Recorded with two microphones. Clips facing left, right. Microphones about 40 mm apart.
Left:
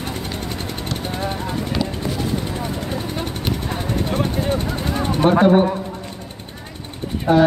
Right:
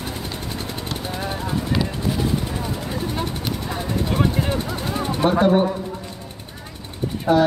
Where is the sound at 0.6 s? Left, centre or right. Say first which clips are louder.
Left 2 dB; left.